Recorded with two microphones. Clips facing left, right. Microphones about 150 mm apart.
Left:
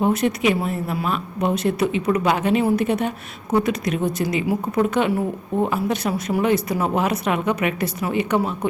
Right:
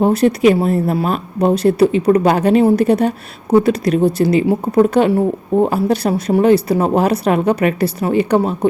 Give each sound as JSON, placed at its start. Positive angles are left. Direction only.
{"t": 0.0, "sound": "speech", "side_deg": -35}